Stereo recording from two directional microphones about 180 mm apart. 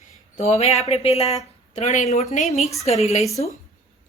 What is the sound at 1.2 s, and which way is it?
Speech, centre (ahead or behind).